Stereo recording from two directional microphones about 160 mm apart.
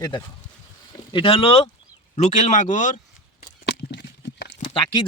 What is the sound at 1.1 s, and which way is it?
Speech, 35° left (ahead or behind).